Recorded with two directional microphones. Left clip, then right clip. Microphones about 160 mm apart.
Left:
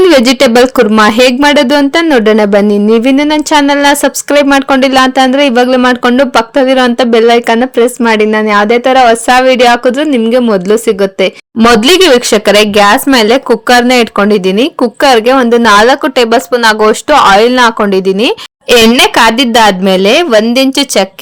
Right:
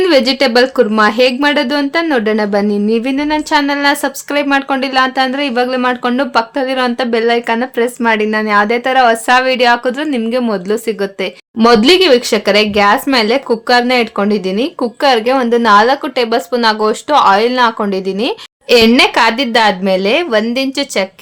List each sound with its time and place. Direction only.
0.0 s speech: 55° left (ahead or behind)